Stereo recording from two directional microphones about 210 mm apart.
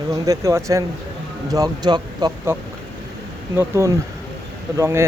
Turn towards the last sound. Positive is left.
turn(degrees=-15)  # may be behind; listen again after turning